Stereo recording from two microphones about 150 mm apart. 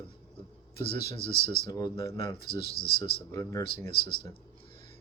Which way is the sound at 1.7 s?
25° left (ahead or behind).